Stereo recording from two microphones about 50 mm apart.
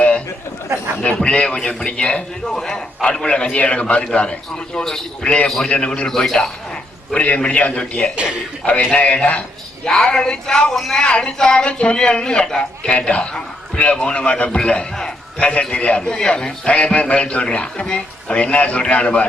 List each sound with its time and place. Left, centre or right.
1.2 s a man's voice: left
6.1 s a man's voice: centre
7.1 s a man's voice: left
8.1 s a man's voice: right
8.6 s a man's voice: left; by 10.9 s centre
10.9 s a man's voice: centre